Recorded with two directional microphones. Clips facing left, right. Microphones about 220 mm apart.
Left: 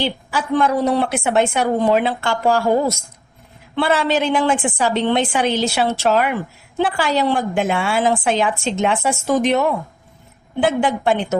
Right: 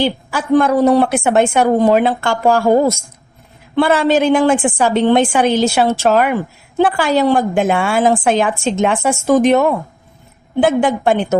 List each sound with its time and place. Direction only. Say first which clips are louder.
0.0 s a woman's voice: right 4 dB; 45° right (ahead or behind)